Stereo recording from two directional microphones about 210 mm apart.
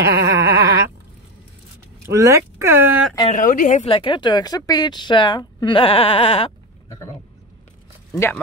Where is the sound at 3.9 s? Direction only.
25° left (ahead or behind).